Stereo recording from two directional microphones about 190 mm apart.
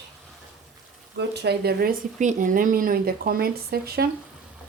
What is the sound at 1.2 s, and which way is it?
Speech, 60° right (ahead or behind).